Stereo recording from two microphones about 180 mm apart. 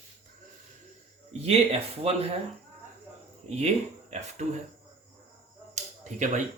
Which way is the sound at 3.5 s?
40° right (ahead or behind).